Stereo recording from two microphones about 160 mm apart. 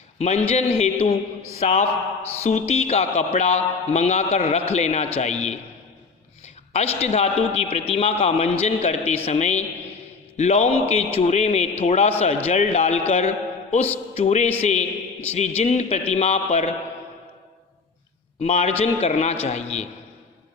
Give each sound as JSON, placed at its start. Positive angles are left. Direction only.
{"t": 0.2, "sound": "a man's voice", "side_deg": 45}
{"t": 6.7, "sound": "a man's voice", "side_deg": 40}
{"t": 18.3, "sound": "a man's voice", "side_deg": 40}